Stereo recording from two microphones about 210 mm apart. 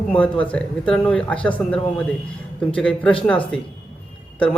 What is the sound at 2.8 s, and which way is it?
Speech, 5° left (ahead or behind).